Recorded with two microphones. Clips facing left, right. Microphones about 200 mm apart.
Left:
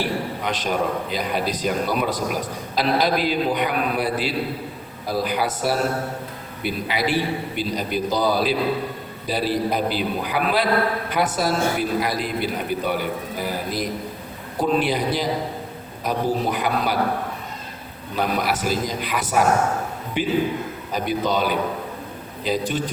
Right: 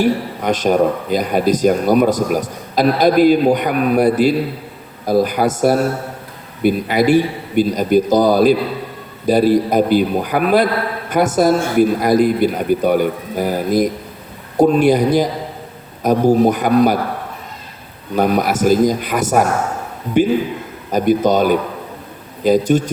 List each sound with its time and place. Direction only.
0.0 s speech: 45° right (ahead or behind)
18.2 s speech: 45° right (ahead or behind)